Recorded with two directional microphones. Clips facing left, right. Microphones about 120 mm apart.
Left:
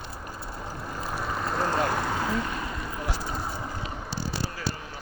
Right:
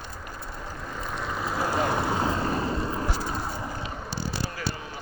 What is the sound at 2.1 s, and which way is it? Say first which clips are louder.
Vehicle: right 3 dB; 30° right (ahead or behind).